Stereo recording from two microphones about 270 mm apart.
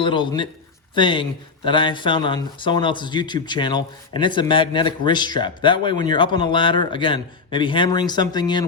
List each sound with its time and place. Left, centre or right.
0.0 s speech: centre